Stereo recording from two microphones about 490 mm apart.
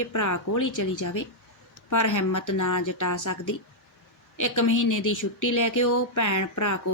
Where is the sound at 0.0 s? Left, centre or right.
Left.